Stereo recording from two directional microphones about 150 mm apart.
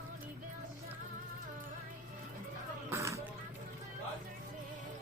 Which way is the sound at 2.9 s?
20° right (ahead or behind).